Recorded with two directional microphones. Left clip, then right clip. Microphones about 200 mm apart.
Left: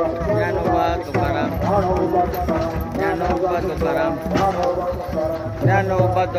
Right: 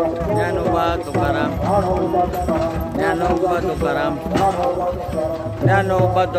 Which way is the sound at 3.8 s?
15° right (ahead or behind).